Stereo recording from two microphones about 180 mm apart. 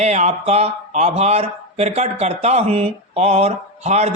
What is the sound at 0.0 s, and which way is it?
Speech, 40° right (ahead or behind).